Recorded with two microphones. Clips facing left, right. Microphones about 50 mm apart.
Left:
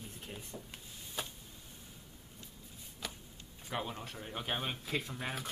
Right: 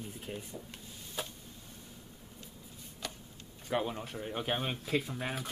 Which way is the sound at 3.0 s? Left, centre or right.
Centre.